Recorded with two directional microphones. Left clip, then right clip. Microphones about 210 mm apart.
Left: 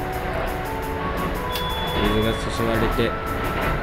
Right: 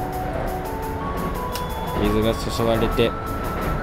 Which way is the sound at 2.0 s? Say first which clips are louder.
Right 3 dB; 15° right (ahead or behind).